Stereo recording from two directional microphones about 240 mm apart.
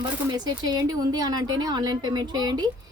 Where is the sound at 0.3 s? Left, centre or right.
Centre.